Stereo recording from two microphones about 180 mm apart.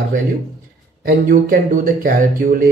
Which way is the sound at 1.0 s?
55° right (ahead or behind).